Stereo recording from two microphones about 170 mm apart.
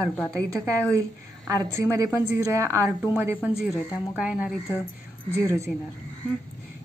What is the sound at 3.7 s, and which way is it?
Speech, 20° left (ahead or behind).